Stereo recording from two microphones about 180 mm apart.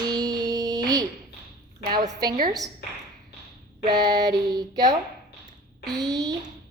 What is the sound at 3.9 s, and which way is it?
Clapping, 20° right (ahead or behind).